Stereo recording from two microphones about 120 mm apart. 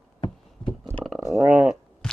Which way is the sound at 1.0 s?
5° right (ahead or behind).